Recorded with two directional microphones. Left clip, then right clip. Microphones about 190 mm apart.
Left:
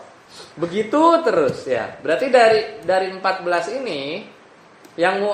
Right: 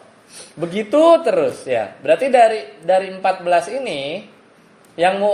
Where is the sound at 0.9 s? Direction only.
30° right (ahead or behind).